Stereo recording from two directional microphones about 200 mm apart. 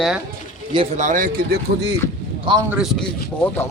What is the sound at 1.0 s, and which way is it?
Speech, 40° right (ahead or behind).